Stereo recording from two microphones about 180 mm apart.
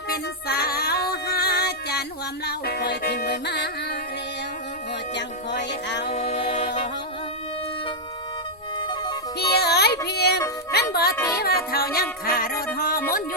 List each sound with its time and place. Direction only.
0.1 s music: 60° left (ahead or behind)
5.1 s music: 75° left (ahead or behind)
6.1 s music: 35° left (ahead or behind)
9.4 s music: 65° left (ahead or behind)
10.9 s a child's voice: 60° left (ahead or behind)
11.3 s music: 60° left (ahead or behind)